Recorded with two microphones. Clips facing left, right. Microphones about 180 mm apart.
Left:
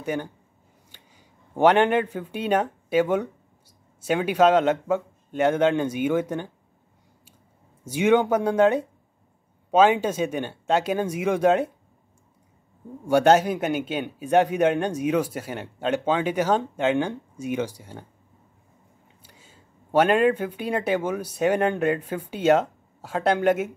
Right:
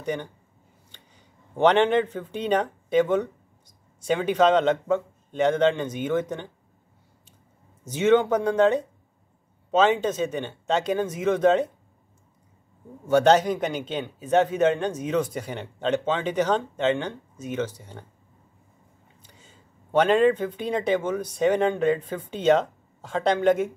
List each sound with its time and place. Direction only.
0.0 s a man's voice: 5° left (ahead or behind)
0.9 s a sound: 10° left (ahead or behind)
1.6 s speech: 10° left (ahead or behind)
7.8 s a man's voice: 10° left (ahead or behind)
13.0 s a man's voice: 10° left (ahead or behind)
19.2 s speech: 10° left (ahead or behind)